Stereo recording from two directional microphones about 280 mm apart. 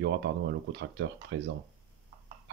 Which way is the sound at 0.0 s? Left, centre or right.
Right.